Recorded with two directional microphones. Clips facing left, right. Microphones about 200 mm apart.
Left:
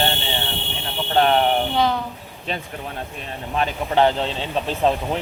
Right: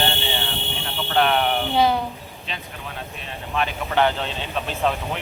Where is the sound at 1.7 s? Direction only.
10° right (ahead or behind).